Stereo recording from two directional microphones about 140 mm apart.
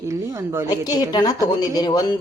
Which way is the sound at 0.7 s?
30° left (ahead or behind).